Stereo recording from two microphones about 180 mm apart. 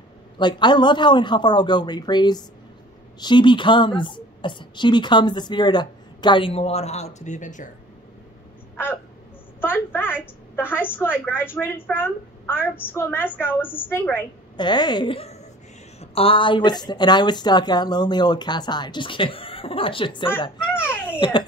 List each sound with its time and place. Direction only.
0.4 s a woman's voice: 25° left (ahead or behind); by 7.7 s 45° left (ahead or behind)
9.6 s a sound: 10° left (ahead or behind)
10.5 s a woman's voice: 10° left (ahead or behind)
14.6 s a woman's voice: 25° left (ahead or behind)
20.8 s babbling: 10° left (ahead or behind)
21.2 s a woman's voice: 25° left (ahead or behind)